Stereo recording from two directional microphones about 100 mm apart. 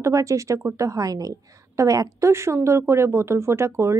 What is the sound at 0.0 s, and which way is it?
Speech, 30° right (ahead or behind).